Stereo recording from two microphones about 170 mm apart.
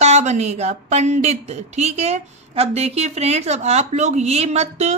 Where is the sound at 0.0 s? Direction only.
40° right (ahead or behind).